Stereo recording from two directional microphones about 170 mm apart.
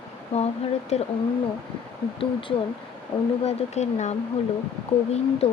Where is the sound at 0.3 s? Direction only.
40° left (ahead or behind).